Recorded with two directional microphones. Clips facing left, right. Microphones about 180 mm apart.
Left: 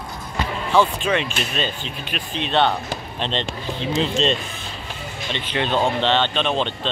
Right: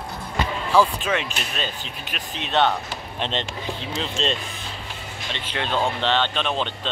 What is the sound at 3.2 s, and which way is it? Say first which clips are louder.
Speech: left 1 dB; 10° right (ahead or behind).